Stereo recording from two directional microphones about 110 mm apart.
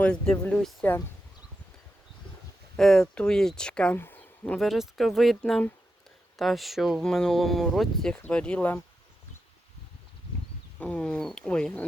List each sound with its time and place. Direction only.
0.0 s speech: 10° left (ahead or behind)
0.8 s speech: 20° left (ahead or behind)
2.7 s speech: 5° left (ahead or behind)
3.9 s a sound: 20° left (ahead or behind)
4.5 s speech: centre (ahead or behind)
10.8 s speech: 10° left (ahead or behind)